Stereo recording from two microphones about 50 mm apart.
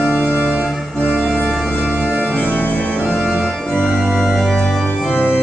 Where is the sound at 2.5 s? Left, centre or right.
Left.